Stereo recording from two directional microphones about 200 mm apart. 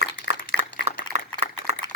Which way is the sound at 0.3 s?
45° right (ahead or behind).